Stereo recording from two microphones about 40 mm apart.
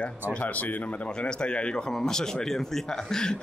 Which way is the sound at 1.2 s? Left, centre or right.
Left.